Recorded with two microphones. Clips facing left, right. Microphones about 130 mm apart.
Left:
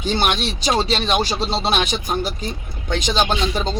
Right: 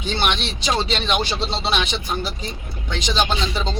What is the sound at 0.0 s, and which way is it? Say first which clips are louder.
A man's voice: left 3 dB; 40° left (ahead or behind).